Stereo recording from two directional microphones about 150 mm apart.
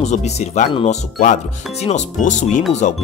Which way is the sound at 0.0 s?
50° left (ahead or behind).